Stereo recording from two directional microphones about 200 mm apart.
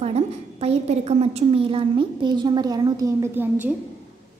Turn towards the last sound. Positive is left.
turn(degrees=-10)  # may be behind; listen again after turning